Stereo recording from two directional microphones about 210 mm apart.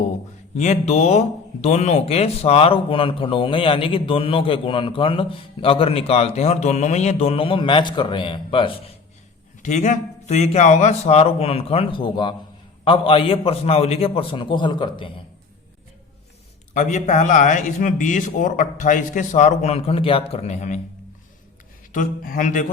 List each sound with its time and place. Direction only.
0.5 s a man's voice: 35° left (ahead or behind)
9.6 s a man's voice: 35° left (ahead or behind)
16.7 s a man's voice: 35° left (ahead or behind)
21.9 s a man's voice: 40° left (ahead or behind)